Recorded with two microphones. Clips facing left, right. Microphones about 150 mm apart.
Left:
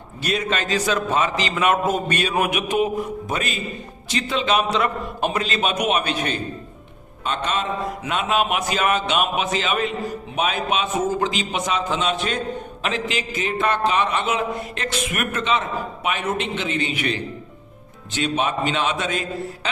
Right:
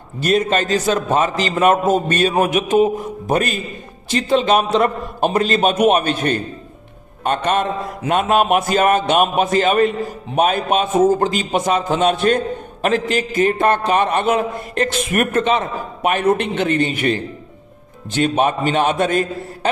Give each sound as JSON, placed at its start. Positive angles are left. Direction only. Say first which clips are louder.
{"t": 0.2, "sound": "a man's voice", "louder": "right 7 dB", "side_deg": -45}